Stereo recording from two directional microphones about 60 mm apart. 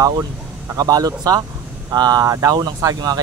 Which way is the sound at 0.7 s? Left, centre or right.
Right.